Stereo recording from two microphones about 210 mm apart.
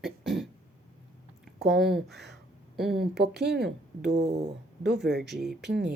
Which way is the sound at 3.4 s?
50° right (ahead or behind).